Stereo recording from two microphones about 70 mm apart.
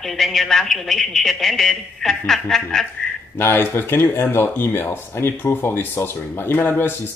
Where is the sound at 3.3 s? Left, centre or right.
Left.